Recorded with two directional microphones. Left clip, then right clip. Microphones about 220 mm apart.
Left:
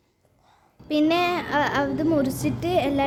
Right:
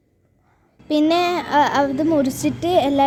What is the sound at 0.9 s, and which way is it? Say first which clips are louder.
A child's voice: right 4 dB; 20° right (ahead or behind).